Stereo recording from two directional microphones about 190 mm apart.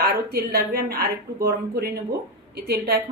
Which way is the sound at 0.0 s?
55° right (ahead or behind).